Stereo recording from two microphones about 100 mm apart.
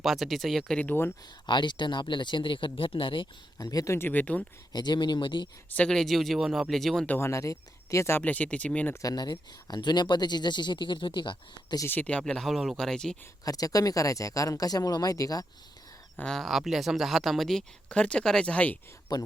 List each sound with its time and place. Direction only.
0.0 s speech: centre (ahead or behind)
0.8 s speech: 20° left (ahead or behind)
1.5 s speech: 50° left (ahead or behind)
3.6 s speech: 35° left (ahead or behind)
3.9 s speech: 20° left (ahead or behind)
4.7 s speech: 45° left (ahead or behind)
5.6 s speech: 10° left (ahead or behind)
7.1 s speech: 25° left (ahead or behind)
8.2 s speech: 15° left (ahead or behind)
9.0 s speech: 40° left (ahead or behind)
11.9 s speech: 15° left (ahead or behind)
13.4 s speech: 35° left (ahead or behind)
16.3 s speech: centre (ahead or behind)
19.1 s speech: 40° left (ahead or behind)